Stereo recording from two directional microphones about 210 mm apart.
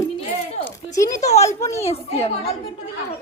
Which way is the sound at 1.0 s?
35° left (ahead or behind).